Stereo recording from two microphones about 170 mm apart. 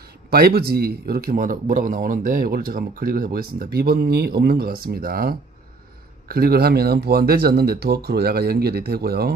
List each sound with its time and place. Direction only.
0.3 s a man's voice: 65° right (ahead or behind)